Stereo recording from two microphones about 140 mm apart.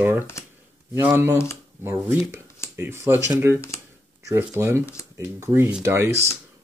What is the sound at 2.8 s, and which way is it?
Speech, 15° right (ahead or behind).